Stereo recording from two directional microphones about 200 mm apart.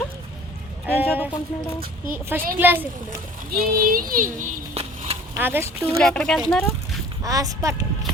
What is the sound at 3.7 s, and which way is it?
A child's voice, 45° right (ahead or behind).